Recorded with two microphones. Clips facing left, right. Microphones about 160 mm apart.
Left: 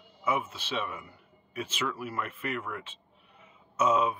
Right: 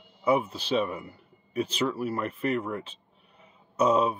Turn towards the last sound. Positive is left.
turn(degrees=-35)  # may be behind; listen again after turning